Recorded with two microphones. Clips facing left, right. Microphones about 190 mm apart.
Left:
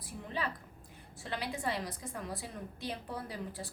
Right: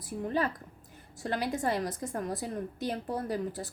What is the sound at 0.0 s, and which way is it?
A woman's voice, 45° right (ahead or behind).